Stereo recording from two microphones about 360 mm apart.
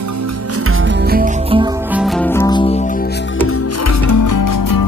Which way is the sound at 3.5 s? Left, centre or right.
Left.